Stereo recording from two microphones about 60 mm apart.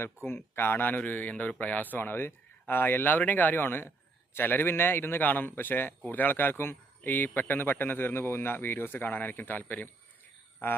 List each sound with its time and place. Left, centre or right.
0.3 s speech: left